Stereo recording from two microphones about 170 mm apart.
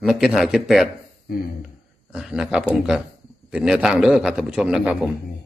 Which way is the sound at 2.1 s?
5° right (ahead or behind).